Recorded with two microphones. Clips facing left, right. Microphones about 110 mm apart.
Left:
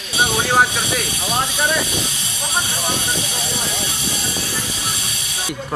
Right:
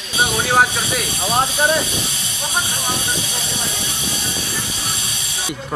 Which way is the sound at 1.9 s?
35° left (ahead or behind).